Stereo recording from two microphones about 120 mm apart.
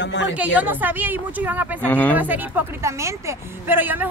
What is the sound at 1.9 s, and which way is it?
Speech, 15° left (ahead or behind).